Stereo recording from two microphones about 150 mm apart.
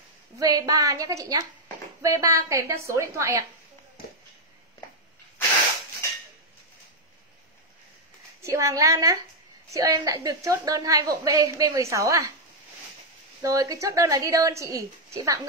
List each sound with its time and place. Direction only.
0.4 s a woman's voice: 25° right (ahead or behind)
8.4 s a woman's voice: 20° right (ahead or behind)
13.4 s a woman's voice: 20° right (ahead or behind)